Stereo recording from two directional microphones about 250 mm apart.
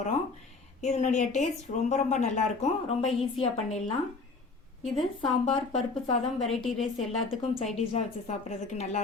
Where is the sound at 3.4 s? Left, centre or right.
Left.